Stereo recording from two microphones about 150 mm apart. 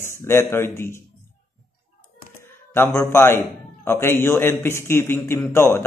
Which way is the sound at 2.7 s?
15° left (ahead or behind).